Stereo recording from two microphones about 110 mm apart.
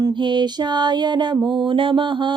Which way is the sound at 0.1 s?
45° right (ahead or behind).